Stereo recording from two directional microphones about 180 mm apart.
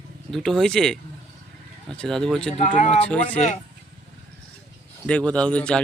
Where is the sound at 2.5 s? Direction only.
40° left (ahead or behind).